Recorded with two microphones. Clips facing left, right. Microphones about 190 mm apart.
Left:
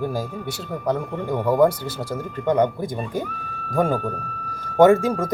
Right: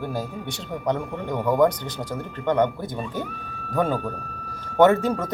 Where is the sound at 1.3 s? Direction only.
30° left (ahead or behind).